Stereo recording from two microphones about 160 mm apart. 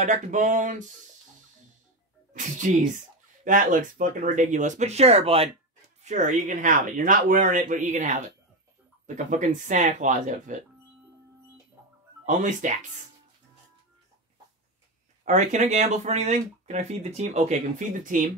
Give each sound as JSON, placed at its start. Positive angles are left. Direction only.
{"t": 0.0, "sound": "speech", "side_deg": -50}
{"t": 2.3, "sound": "speech", "side_deg": -50}
{"t": 6.0, "sound": "speech", "side_deg": -50}
{"t": 12.3, "sound": "speech", "side_deg": -50}
{"t": 15.2, "sound": "speech", "side_deg": -50}